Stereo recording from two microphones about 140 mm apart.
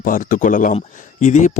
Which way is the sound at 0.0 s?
75° left (ahead or behind).